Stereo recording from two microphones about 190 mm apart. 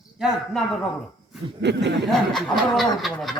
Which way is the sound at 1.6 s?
65° right (ahead or behind).